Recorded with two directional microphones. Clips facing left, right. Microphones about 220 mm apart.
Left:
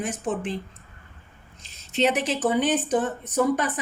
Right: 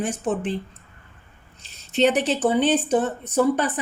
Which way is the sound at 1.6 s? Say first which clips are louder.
Right 3 dB; 35° right (ahead or behind).